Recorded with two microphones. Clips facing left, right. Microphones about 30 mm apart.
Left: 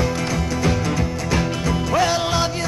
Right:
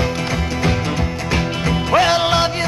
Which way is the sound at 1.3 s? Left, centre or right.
Right.